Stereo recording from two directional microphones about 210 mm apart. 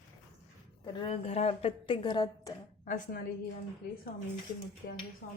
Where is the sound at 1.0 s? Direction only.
30° left (ahead or behind).